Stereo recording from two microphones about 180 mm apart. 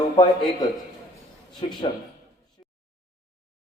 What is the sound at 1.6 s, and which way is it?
Speech, 25° left (ahead or behind).